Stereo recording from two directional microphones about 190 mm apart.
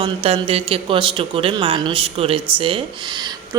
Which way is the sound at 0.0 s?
30° right (ahead or behind).